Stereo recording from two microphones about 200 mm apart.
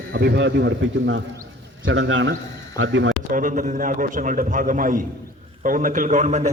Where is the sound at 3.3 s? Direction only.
40° right (ahead or behind).